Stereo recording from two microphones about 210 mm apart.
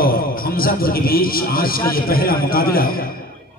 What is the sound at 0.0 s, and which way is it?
A man's voice, 45° left (ahead or behind).